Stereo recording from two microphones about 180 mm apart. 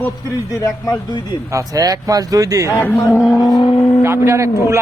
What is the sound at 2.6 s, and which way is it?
Speech, 10° left (ahead or behind).